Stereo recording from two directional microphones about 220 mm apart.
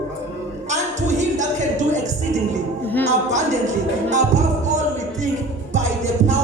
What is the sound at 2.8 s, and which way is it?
Music, 10° left (ahead or behind).